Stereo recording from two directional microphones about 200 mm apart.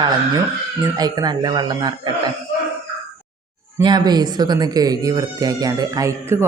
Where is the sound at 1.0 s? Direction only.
20° right (ahead or behind).